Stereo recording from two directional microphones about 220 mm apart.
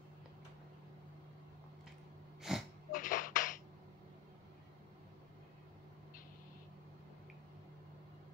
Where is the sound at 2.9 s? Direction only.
35° left (ahead or behind).